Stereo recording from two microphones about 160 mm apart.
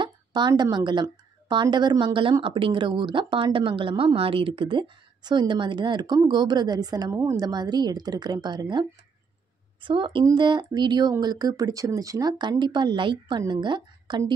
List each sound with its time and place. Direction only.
0.0 s a woman's voice: 25° right (ahead or behind)